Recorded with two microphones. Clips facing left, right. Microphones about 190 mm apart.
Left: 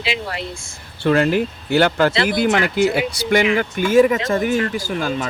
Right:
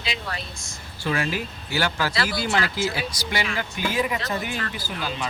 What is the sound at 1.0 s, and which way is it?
Speech, 60° left (ahead or behind).